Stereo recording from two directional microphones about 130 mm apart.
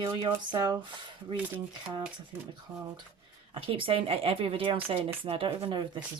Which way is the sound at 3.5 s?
45° right (ahead or behind).